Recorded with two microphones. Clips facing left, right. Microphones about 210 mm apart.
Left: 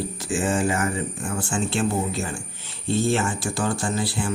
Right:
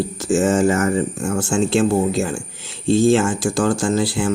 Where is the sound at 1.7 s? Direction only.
85° right.